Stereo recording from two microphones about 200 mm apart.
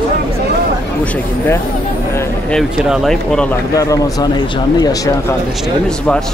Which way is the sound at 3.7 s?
15° left (ahead or behind).